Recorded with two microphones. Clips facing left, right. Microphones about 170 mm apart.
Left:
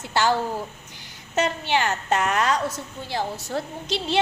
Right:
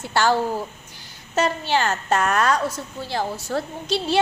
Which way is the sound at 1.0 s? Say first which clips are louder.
Right 2 dB; 20° left (ahead or behind).